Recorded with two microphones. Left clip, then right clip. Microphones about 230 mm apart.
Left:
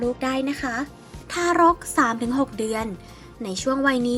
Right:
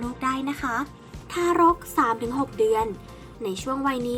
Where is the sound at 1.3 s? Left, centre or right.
Left.